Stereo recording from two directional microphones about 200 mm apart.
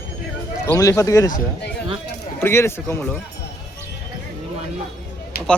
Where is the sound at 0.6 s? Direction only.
15° left (ahead or behind).